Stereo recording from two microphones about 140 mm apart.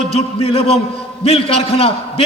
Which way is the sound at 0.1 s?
45° left (ahead or behind).